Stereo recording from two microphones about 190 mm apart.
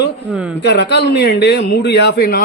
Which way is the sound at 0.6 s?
60° left (ahead or behind).